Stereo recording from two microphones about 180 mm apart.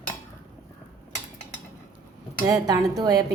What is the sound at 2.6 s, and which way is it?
Speech, 20° right (ahead or behind).